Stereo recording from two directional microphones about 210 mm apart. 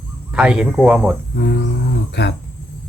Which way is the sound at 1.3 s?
55° left (ahead or behind).